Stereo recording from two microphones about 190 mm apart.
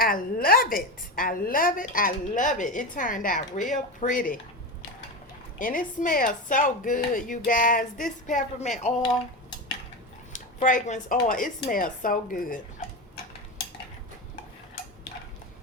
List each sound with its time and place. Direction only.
0.0 s a woman's voice: 50° left (ahead or behind)
5.5 s a woman's voice: 45° left (ahead or behind)
10.3 s a woman's voice: 45° left (ahead or behind)